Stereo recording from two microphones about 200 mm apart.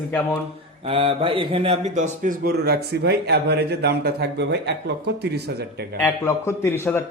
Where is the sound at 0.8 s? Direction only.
25° right (ahead or behind); by 5.3 s 55° right (ahead or behind).